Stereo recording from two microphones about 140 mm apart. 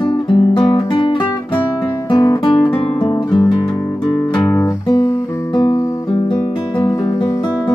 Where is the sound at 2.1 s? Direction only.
30° left (ahead or behind).